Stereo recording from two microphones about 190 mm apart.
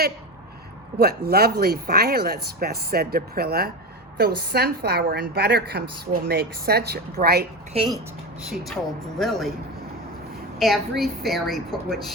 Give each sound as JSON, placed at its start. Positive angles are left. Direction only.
{"t": 0.9, "sound": "a woman's voice", "side_deg": -55}
{"t": 7.7, "sound": "speech", "side_deg": -30}
{"t": 8.4, "sound": "a woman's voice", "side_deg": 0}
{"t": 10.6, "sound": "a woman's voice", "side_deg": 0}